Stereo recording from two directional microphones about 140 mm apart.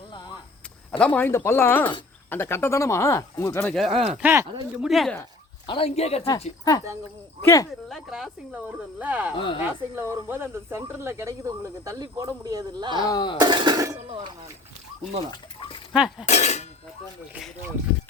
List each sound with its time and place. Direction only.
0.9 s speech: 10° left (ahead or behind)
3.8 s speech: centre (ahead or behind)
4.1 s speech: 15° right (ahead or behind)
4.8 s speech: centre (ahead or behind)
5.6 s speech: 40° left (ahead or behind)
6.7 s speech: 25° left (ahead or behind)
7.9 s speech: centre (ahead or behind)
9.3 s speech: 35° left (ahead or behind)
9.6 s speech: 15° right (ahead or behind)
13.0 s speech: 30° left (ahead or behind)
13.4 s speech: 30° right (ahead or behind)
15.9 s speech: 5° right (ahead or behind)
16.2 s speech: 50° left (ahead or behind)